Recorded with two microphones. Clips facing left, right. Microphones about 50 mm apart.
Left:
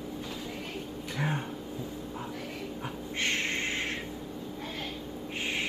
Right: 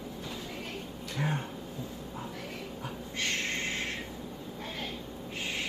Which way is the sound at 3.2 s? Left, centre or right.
Left.